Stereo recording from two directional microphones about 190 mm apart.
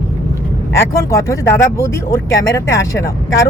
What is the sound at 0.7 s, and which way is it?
Speech, 15° left (ahead or behind).